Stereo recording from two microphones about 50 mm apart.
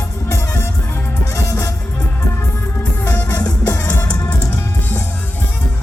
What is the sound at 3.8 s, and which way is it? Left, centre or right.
Music, left.